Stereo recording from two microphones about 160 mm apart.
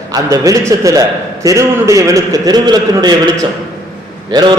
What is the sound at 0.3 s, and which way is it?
A man's voice, 20° right (ahead or behind).